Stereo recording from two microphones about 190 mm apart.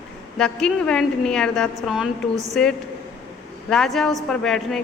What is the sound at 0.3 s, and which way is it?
A woman's voice, 5° left (ahead or behind).